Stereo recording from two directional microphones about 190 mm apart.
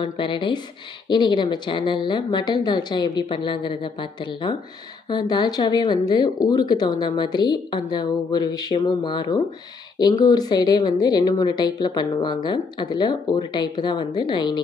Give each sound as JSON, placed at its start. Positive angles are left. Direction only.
{"t": 0.0, "sound": "speech", "side_deg": 25}